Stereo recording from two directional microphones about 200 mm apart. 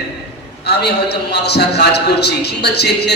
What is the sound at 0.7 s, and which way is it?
A man's voice, 55° left (ahead or behind).